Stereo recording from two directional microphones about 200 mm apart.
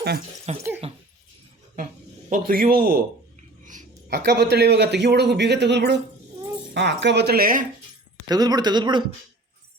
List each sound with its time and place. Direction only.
0.5 s a sound: 35° right (ahead or behind)
2.3 s a man's voice: 45° right (ahead or behind)
4.1 s a man's voice: 55° right (ahead or behind)
8.3 s speech: 20° right (ahead or behind)